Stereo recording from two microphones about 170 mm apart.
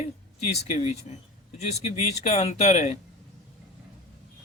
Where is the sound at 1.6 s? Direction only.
40° left (ahead or behind).